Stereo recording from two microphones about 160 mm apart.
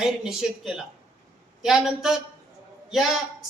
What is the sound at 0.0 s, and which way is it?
A man's voice, centre (ahead or behind).